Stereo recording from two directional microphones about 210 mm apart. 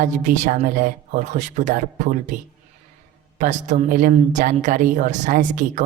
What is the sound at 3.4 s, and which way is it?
Speech, 35° right (ahead or behind).